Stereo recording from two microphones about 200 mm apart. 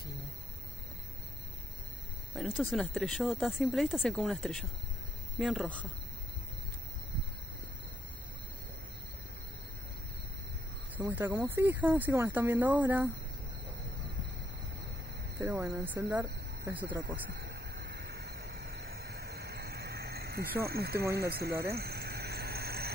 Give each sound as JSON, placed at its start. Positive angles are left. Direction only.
{"t": 2.3, "sound": "speech", "side_deg": 0}
{"t": 11.0, "sound": "speech", "side_deg": -10}
{"t": 15.4, "sound": "speech", "side_deg": -10}
{"t": 17.6, "sound": "a sound", "side_deg": -50}
{"t": 20.7, "sound": "speech", "side_deg": -50}
{"t": 21.7, "sound": "vehicle", "side_deg": -50}